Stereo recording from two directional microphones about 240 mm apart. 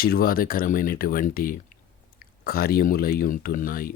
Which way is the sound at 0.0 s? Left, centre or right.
Left.